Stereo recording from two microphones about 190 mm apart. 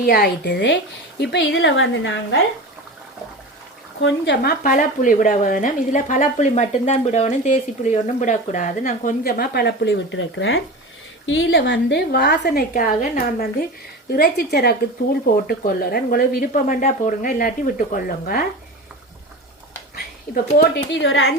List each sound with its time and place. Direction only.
0.0 s a woman's voice: 55° left (ahead or behind); by 2.1 s 90° left
4.0 s a woman's voice: 60° left (ahead or behind)
20.6 s a woman's voice: 65° left (ahead or behind); by 21.3 s 80° left